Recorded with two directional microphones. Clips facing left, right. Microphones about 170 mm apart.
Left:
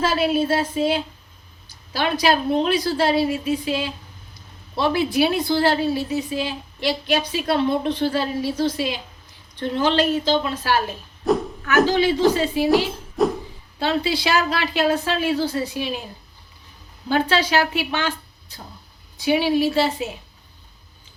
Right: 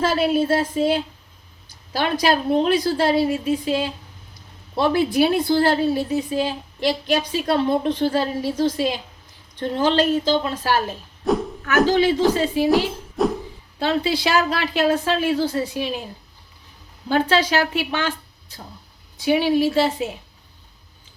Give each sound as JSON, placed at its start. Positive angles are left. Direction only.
{"t": 0.0, "sound": "a woman's voice", "side_deg": -45}
{"t": 11.3, "sound": "a sound", "side_deg": 0}
{"t": 11.9, "sound": "a woman's voice", "side_deg": -45}
{"t": 12.7, "sound": "music", "side_deg": 0}
{"t": 13.7, "sound": "a woman's voice", "side_deg": -45}
{"t": 17.1, "sound": "a woman's voice", "side_deg": -45}